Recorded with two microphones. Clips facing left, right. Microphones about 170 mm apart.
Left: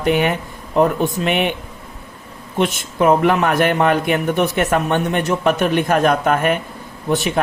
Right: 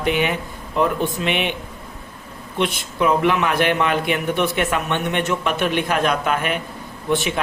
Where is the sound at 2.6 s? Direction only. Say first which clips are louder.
Left 3 dB; 45° left (ahead or behind).